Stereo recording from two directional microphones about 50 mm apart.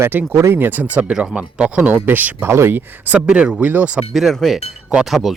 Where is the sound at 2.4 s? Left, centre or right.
Right.